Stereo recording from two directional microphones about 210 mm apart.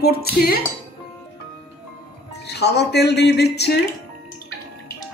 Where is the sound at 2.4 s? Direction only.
50° left (ahead or behind).